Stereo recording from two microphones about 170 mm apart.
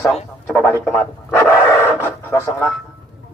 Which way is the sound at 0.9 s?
15° left (ahead or behind).